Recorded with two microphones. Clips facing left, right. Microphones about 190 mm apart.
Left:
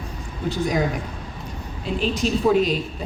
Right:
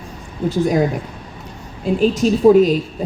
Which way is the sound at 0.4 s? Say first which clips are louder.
Right 7 dB; 45° right (ahead or behind).